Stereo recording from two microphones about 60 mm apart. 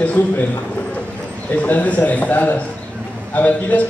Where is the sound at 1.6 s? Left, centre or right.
Left.